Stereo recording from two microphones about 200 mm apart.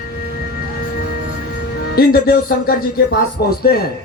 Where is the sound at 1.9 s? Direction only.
50° left (ahead or behind).